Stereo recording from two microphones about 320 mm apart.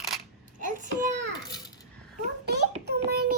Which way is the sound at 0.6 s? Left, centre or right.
Right.